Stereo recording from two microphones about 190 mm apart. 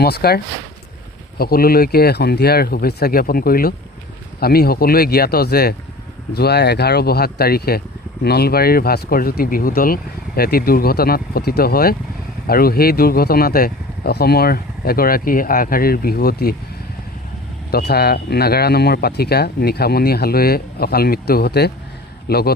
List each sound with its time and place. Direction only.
0.0 s speech: 55° left (ahead or behind)
17.7 s speech: 55° left (ahead or behind)